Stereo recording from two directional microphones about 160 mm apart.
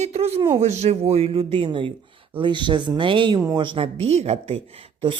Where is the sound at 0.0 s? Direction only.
40° right (ahead or behind).